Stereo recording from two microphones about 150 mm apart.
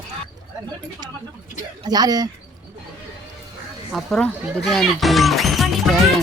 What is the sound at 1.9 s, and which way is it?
Speech, 25° right (ahead or behind).